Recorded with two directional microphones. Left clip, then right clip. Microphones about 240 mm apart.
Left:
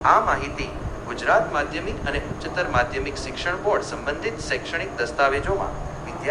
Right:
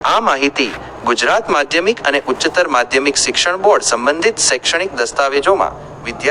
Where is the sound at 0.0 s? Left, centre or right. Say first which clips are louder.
Right 5 dB; right.